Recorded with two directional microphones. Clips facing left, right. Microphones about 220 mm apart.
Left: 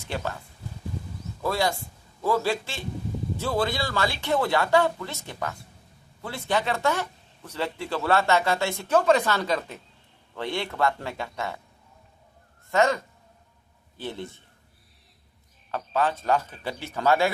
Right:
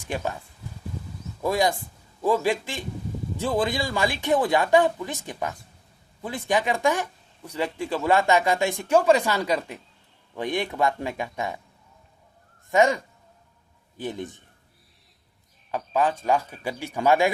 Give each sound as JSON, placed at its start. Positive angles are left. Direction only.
{"t": 0.0, "sound": "speech", "side_deg": -15}
{"t": 1.4, "sound": "speech", "side_deg": -20}
{"t": 12.7, "sound": "speech", "side_deg": -15}
{"t": 15.7, "sound": "speech", "side_deg": -15}